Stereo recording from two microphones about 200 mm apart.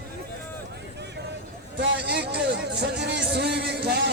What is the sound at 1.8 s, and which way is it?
Speech, 60° right (ahead or behind).